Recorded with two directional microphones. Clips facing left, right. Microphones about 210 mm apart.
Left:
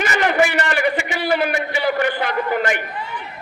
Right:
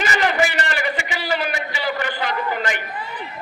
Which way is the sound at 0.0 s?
50° left (ahead or behind).